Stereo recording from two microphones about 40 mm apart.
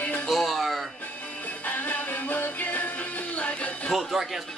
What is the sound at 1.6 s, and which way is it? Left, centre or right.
Music, left.